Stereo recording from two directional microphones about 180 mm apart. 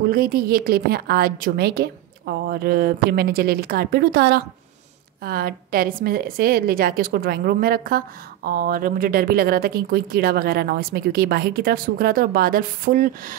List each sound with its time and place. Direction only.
0.1 s speech: 55° right (ahead or behind)